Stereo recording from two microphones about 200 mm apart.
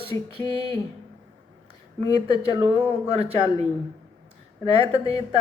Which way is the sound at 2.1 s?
30° right (ahead or behind).